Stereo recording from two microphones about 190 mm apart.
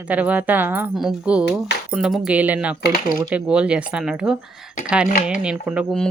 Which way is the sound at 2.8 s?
50° left (ahead or behind).